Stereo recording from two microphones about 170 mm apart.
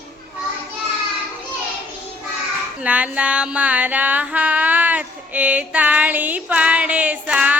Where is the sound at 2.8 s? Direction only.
5° right (ahead or behind).